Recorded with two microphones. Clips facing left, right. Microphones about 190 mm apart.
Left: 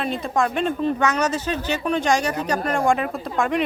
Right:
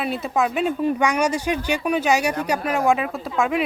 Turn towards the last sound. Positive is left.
turn(degrees=0)  # may be behind; listen again after turning